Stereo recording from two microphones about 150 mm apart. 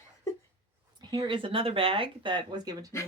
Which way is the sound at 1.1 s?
30° right (ahead or behind).